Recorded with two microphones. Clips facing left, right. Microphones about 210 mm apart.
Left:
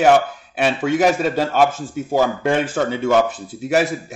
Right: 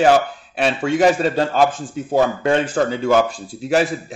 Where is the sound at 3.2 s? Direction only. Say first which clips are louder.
Left 1 dB; 20° left (ahead or behind).